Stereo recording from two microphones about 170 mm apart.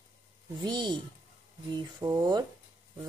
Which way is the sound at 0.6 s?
25° right (ahead or behind).